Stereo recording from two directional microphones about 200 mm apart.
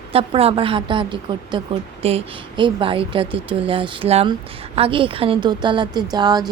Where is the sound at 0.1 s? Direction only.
30° right (ahead or behind).